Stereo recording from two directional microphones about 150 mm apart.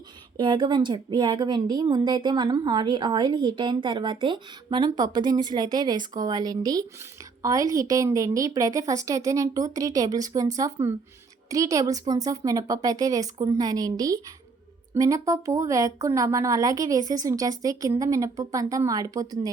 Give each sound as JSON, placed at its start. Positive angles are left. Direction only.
{"t": 0.3, "sound": "a woman's voice", "side_deg": -30}